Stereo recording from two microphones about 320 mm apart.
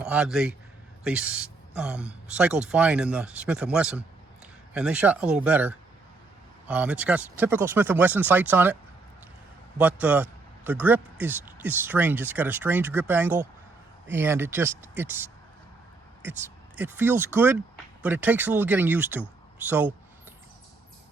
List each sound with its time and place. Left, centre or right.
0.0 s speech: centre
16.4 s speech: centre